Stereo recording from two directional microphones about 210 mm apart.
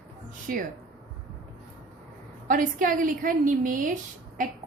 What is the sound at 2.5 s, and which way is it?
A woman's voice, 40° right (ahead or behind).